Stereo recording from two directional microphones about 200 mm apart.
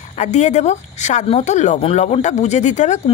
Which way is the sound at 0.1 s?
35° left (ahead or behind).